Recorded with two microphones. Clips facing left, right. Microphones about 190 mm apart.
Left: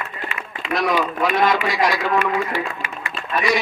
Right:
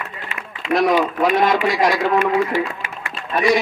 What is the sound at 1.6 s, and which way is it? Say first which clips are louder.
A man's voice: right 3 dB; 50° right (ahead or behind).